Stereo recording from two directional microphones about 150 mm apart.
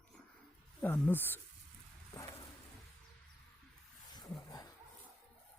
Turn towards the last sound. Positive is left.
turn(degrees=25)  # may be behind; listen again after turning